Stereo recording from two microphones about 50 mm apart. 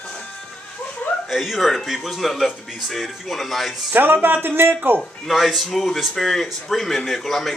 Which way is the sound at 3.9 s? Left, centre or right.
Right.